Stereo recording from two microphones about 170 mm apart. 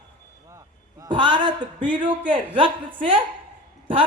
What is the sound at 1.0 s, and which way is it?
A woman's voice, 25° right (ahead or behind).